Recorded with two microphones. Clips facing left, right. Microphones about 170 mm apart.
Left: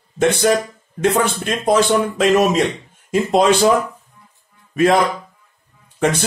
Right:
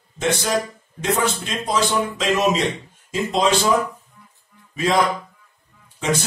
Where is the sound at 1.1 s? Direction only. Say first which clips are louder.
Left 3 dB; 55° left (ahead or behind).